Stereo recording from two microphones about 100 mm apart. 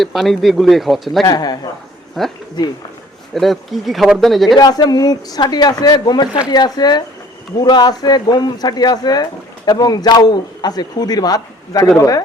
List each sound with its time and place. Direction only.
0.0 s speech: centre (ahead or behind)
1.2 s speech: 45° left (ahead or behind)
2.2 s speech: centre (ahead or behind)
3.3 s speech: centre (ahead or behind)
4.5 s a man's voice: 40° left (ahead or behind)